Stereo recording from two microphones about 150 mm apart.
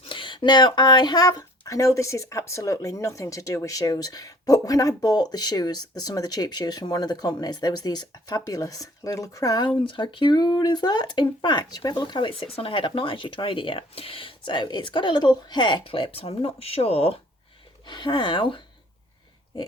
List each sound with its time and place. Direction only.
0.0 s speech: 35° left (ahead or behind)